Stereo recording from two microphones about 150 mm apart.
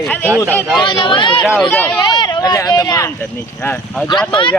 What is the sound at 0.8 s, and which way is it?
Speech, 30° left (ahead or behind).